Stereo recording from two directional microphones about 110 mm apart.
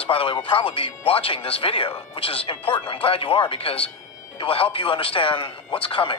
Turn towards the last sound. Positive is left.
turn(degrees=50)  # may be behind; listen again after turning